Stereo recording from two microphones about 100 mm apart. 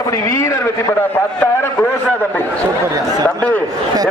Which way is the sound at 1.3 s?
10° left (ahead or behind).